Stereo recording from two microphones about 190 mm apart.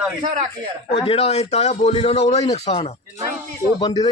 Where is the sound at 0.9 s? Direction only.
30° left (ahead or behind).